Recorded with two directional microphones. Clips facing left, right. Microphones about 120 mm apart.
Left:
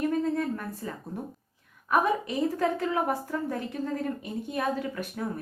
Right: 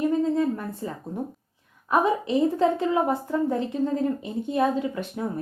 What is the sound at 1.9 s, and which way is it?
A woman's voice, 25° right (ahead or behind).